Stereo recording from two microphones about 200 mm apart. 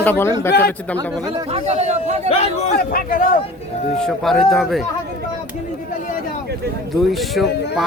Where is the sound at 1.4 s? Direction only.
30° right (ahead or behind).